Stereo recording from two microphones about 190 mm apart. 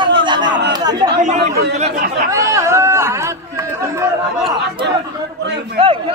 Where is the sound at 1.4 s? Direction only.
60° right (ahead or behind).